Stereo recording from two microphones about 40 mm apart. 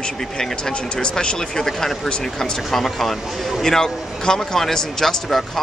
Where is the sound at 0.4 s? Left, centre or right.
Centre.